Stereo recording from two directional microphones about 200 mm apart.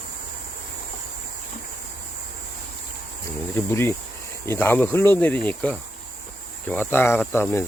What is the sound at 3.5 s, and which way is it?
Speech, 10° left (ahead or behind).